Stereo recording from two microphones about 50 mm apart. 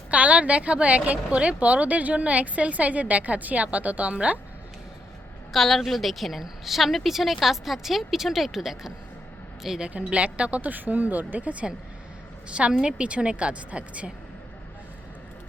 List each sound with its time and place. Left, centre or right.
0.1 s speech: right
5.5 s a woman's voice: centre
9.9 s speech: right